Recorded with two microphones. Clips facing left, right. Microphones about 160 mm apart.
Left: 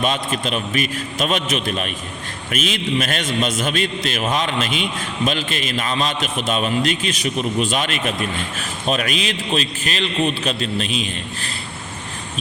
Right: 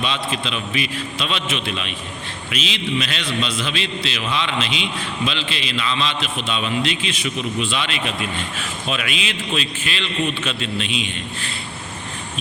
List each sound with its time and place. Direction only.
0.0 s a man's voice: 45° left (ahead or behind)